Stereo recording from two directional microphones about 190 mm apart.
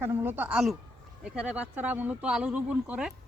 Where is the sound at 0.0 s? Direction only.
10° right (ahead or behind).